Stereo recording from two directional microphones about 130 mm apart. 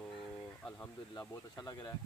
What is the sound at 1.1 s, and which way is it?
Speech, 30° left (ahead or behind).